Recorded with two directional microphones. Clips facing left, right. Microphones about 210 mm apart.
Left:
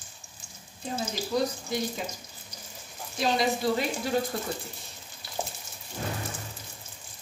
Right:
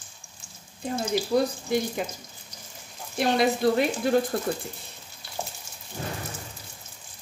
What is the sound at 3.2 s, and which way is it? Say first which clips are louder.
Speech: right 4 dB; 60° right (ahead or behind).